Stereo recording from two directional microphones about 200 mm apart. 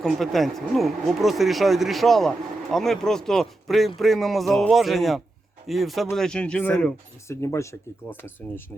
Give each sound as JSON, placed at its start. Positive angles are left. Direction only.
{"t": 0.0, "sound": "speech", "side_deg": 0}